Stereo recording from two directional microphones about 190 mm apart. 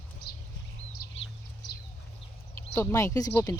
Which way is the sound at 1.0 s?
55° left (ahead or behind).